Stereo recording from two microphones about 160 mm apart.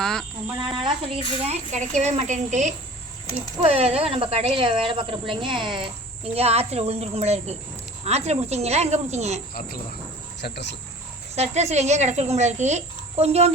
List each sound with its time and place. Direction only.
0.0 s cricket: 5° left (ahead or behind)
0.6 s speech: 30° right (ahead or behind)
1.3 s speech: 40° right (ahead or behind)
10.4 s speech: 90° left
11.3 s speech: 45° right (ahead or behind)